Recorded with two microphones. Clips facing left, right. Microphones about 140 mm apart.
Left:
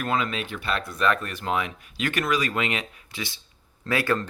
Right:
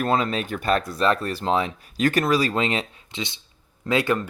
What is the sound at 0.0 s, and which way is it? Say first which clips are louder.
Speech: right 4 dB; 35° right (ahead or behind).